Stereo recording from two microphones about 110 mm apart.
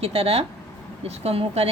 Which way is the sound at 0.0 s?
70° right (ahead or behind).